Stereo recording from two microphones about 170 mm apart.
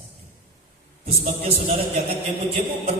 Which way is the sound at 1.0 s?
35° right (ahead or behind).